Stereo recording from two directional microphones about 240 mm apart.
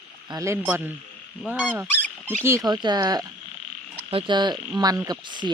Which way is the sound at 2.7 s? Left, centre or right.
Centre.